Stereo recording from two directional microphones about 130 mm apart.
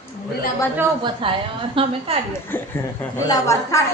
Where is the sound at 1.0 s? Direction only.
40° right (ahead or behind).